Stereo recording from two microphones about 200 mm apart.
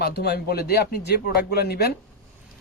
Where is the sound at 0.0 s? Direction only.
55° left (ahead or behind).